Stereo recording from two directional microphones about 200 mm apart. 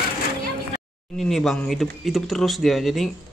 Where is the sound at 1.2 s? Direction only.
Centre (ahead or behind).